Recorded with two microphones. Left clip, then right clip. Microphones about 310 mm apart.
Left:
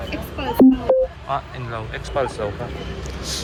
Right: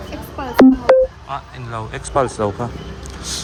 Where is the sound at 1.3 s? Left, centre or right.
Centre.